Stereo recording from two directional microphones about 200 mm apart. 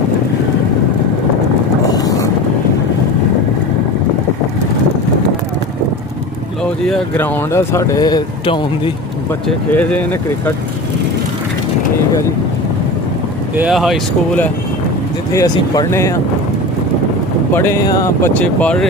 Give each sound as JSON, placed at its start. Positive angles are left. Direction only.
{"t": 1.9, "sound": "boat", "side_deg": 20}
{"t": 6.8, "sound": "speech", "side_deg": 5}
{"t": 7.5, "sound": "speech", "side_deg": 15}
{"t": 9.7, "sound": "speech", "side_deg": 10}
{"t": 13.6, "sound": "speech", "side_deg": 0}
{"t": 15.3, "sound": "speech", "side_deg": 15}
{"t": 17.5, "sound": "speech", "side_deg": 10}